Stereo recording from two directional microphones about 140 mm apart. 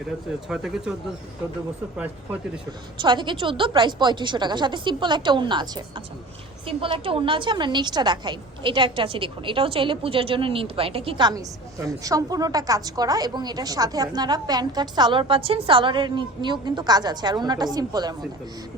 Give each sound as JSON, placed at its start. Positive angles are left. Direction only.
{"t": 0.4, "sound": "speech", "side_deg": -5}
{"t": 3.0, "sound": "a woman's voice", "side_deg": -35}